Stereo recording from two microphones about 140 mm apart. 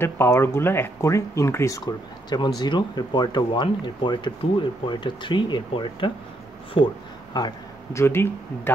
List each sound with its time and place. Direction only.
0.0 s speech: 15° left (ahead or behind); by 6.9 s 40° left (ahead or behind)
7.3 s speech: 25° left (ahead or behind)